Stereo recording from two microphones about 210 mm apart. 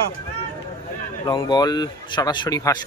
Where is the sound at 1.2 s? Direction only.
20° left (ahead or behind).